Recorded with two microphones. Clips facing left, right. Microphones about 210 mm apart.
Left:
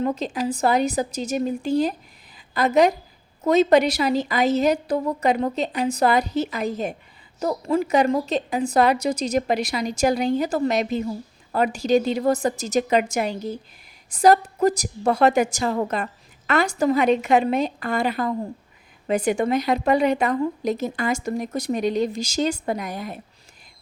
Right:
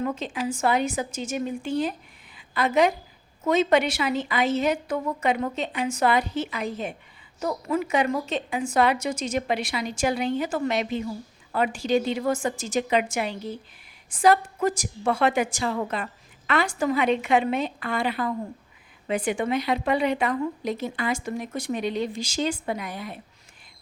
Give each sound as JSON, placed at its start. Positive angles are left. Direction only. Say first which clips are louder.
{"t": 0.0, "sound": "a woman's voice", "louder": "left 4 dB", "side_deg": 35}